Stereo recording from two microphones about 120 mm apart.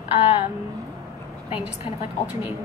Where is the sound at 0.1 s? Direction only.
60° left (ahead or behind).